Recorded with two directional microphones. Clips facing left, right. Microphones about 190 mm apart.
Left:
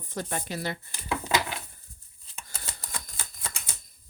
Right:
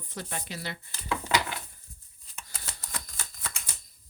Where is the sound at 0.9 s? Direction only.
15° left (ahead or behind).